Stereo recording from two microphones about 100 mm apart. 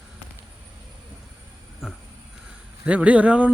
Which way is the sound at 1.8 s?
5° right (ahead or behind).